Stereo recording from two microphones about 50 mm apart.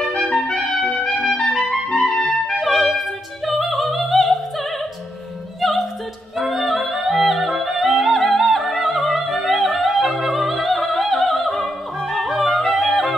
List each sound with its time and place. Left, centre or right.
0.2 s trumpet: centre
0.8 s trumpet: centre
1.5 s clarinet: centre
2.4 s music: centre
3.4 s opera: centre
5.6 s opera: centre
6.3 s music: centre
12.1 s yodeling: centre